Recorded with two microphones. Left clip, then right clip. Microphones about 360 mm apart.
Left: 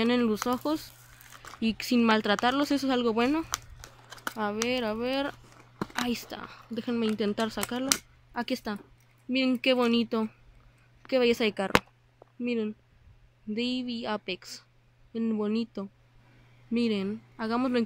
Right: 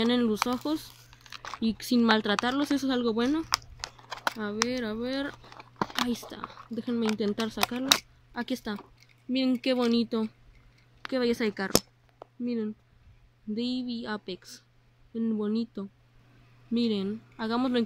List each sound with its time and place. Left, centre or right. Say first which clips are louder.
0.0 s speech: even; centre
13.7 s speech: left 1 dB; centre
14.0 s speech: left 3 dB; centre
16.7 s speech: even; centre